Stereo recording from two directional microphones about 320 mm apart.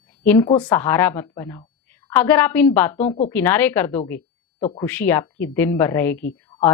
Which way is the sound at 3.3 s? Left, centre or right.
Centre.